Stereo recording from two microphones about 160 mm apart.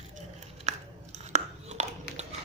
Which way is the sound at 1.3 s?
45° right (ahead or behind).